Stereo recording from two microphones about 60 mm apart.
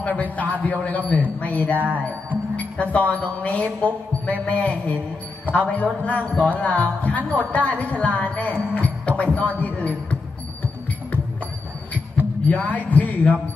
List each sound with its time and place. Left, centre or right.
0.0 s a man's voice: left
1.8 s music: right
2.0 s music: left
2.9 s a man's voice: left
12.4 s a man's voice: left